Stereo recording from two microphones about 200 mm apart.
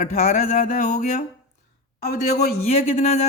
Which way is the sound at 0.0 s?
40° left (ahead or behind).